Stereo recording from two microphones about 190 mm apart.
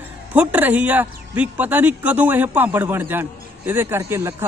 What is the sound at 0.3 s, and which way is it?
Speech, 10° right (ahead or behind).